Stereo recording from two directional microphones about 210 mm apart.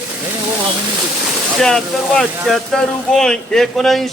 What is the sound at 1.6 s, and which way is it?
Speech, 5° left (ahead or behind).